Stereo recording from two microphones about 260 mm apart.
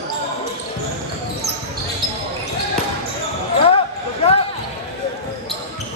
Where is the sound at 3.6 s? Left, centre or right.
Left.